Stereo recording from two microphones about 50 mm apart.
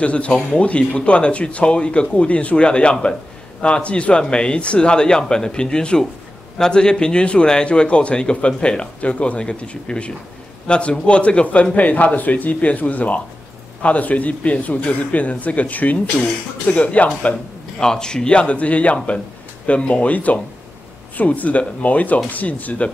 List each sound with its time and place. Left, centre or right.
0.0 s a man's voice: left
17.7 s a man's voice: centre; by 22.8 s left